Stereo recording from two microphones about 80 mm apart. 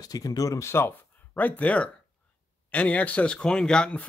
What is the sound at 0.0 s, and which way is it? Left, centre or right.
Speech, left.